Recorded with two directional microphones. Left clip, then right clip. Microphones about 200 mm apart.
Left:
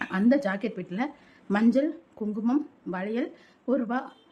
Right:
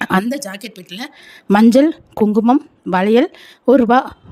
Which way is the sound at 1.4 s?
50° right (ahead or behind).